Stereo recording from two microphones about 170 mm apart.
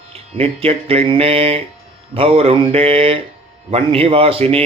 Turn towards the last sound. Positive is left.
turn(degrees=-35)  # may be behind; listen again after turning